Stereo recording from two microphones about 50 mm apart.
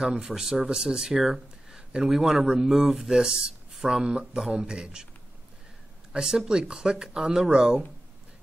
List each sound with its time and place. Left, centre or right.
0.0 s speech: centre
0.3 s speech: centre
4.0 s speech: centre
6.1 s speech: centre